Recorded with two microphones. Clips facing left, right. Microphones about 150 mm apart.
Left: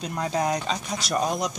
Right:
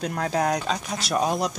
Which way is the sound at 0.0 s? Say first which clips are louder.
Right 2 dB; centre (ahead or behind).